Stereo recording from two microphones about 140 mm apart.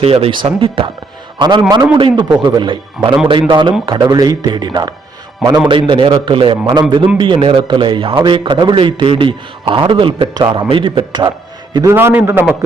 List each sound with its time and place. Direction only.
0.0 s a man's voice: 45° right (ahead or behind)
11.7 s a man's voice: 20° right (ahead or behind)